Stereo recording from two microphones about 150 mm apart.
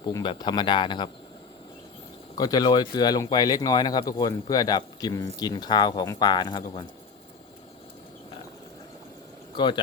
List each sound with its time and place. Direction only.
0.0 s speech: 30° left (ahead or behind)
2.3 s speech: 25° left (ahead or behind)
9.6 s speech: 30° left (ahead or behind)